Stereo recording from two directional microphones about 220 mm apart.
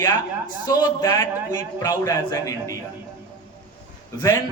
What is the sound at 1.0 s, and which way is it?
A man's voice, 15° left (ahead or behind).